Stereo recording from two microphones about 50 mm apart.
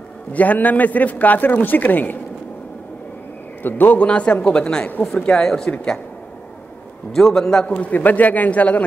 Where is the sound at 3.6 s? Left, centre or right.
Left.